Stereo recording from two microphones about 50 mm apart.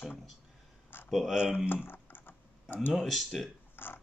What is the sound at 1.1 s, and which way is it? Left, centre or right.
Speech, centre.